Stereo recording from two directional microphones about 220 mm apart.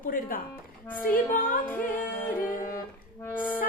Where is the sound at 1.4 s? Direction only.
40° left (ahead or behind).